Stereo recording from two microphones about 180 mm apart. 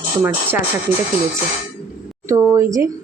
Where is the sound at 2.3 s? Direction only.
15° right (ahead or behind).